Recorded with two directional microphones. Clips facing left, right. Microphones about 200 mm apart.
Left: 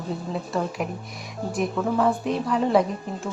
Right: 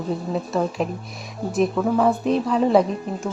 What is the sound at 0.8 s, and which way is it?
Speech, 25° right (ahead or behind).